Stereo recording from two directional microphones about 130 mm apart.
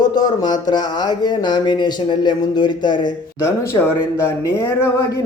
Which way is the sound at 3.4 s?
25° left (ahead or behind).